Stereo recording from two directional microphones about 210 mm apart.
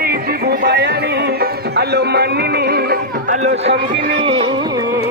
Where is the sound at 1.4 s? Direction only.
50° right (ahead or behind).